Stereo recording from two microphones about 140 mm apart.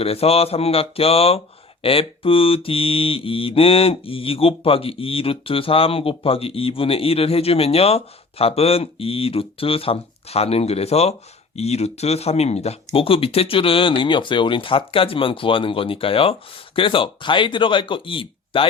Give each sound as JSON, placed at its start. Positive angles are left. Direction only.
{"t": 0.0, "sound": "mantra", "side_deg": 45}
{"t": 11.5, "sound": "speech", "side_deg": 50}